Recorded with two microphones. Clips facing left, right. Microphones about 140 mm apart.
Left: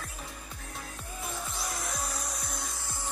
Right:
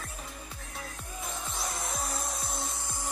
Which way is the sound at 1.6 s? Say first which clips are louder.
Right 2 dB; centre (ahead or behind).